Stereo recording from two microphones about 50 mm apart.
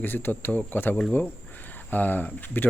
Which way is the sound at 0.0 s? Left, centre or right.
Left.